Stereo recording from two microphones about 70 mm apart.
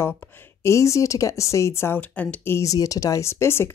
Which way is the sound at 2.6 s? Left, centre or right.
Left.